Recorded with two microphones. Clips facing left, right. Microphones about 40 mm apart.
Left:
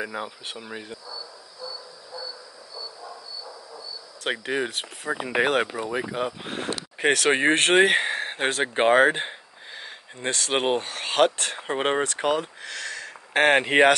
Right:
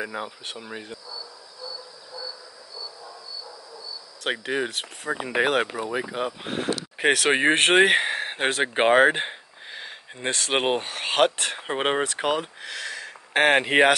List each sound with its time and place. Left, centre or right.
0.0 s speech: centre
2.7 s frog: left
4.2 s speech: centre
8.7 s a sound: right
10.2 s speech: right; by 13.9 s centre